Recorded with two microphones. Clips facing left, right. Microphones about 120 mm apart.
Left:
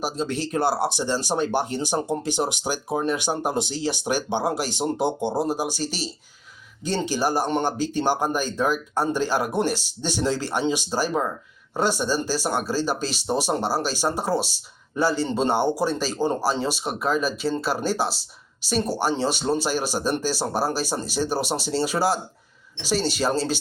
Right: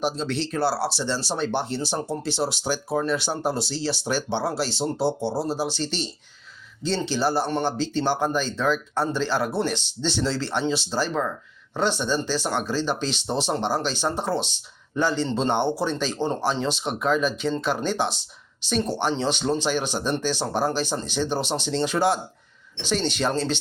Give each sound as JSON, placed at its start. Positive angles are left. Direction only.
{"t": 0.4, "sound": "speech", "side_deg": 15}